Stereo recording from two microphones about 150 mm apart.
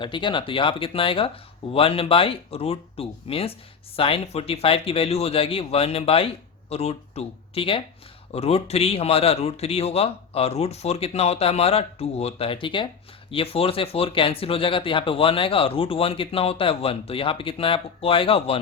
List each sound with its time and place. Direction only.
0.0 s a man's voice: 30° left (ahead or behind)